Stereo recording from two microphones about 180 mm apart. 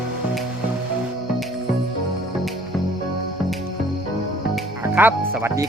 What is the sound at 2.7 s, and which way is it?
Music, centre (ahead or behind).